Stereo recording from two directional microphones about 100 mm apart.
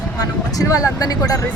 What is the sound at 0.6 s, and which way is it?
Speech, 35° left (ahead or behind).